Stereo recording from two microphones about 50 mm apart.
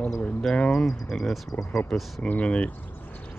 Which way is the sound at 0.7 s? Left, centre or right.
Centre.